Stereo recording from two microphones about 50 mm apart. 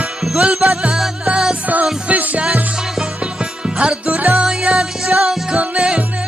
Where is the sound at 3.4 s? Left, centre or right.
Centre.